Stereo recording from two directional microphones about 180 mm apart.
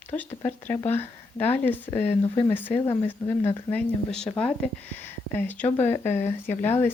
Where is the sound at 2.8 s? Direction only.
25° left (ahead or behind).